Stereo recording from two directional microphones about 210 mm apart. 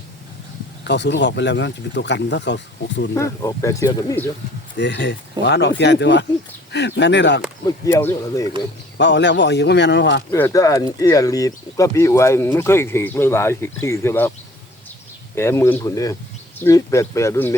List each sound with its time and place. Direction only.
0.9 s speech: 55° left (ahead or behind)
3.2 s speech: 15° left (ahead or behind)
4.8 s speech: 55° left (ahead or behind)
7.6 s speech: 15° left (ahead or behind)
9.0 s speech: 55° left (ahead or behind)
10.3 s speech: 15° left (ahead or behind)
15.4 s speech: 10° left (ahead or behind)